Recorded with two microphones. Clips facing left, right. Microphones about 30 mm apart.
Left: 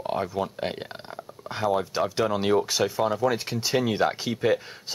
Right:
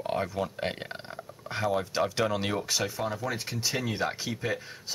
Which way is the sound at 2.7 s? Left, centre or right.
Centre.